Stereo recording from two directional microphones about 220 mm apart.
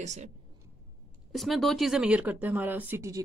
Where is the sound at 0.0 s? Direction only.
30° right (ahead or behind).